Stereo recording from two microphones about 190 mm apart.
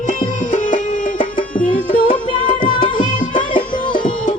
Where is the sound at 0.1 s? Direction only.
45° left (ahead or behind).